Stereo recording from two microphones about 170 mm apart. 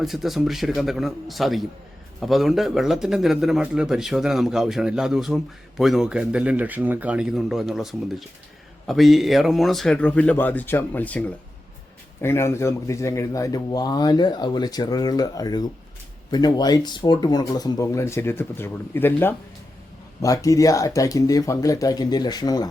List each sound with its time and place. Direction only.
0.0 s speech: centre (ahead or behind); by 22.7 s 25° left (ahead or behind)